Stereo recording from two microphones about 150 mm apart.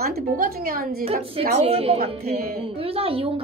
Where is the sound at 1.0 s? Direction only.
40° right (ahead or behind).